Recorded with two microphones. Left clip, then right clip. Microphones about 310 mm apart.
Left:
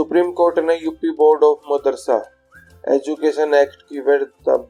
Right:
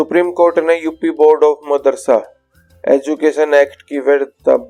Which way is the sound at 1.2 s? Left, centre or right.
Right.